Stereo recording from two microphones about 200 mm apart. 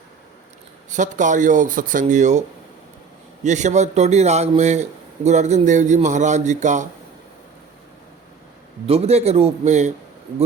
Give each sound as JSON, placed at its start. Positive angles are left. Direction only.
{"t": 0.9, "sound": "a man's voice", "side_deg": -40}
{"t": 3.4, "sound": "a man's voice", "side_deg": -35}
{"t": 8.9, "sound": "a man's voice", "side_deg": -30}